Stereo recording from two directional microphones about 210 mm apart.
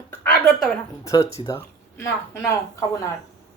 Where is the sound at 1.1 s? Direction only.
15° left (ahead or behind).